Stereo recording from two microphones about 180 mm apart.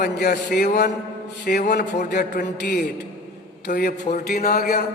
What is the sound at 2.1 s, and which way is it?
Speech, 70° left (ahead or behind).